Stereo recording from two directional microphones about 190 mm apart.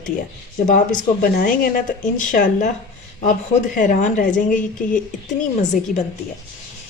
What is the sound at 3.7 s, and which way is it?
Speech, 40° left (ahead or behind).